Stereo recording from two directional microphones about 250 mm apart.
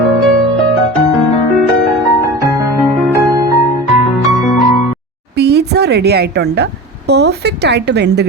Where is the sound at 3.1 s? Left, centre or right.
Centre.